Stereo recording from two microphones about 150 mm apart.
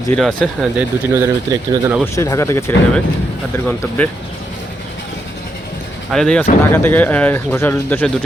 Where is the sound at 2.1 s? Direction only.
20° left (ahead or behind).